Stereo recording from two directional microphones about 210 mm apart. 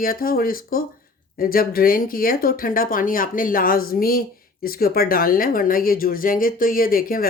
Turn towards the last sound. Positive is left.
turn(degrees=45)  # may be behind; listen again after turning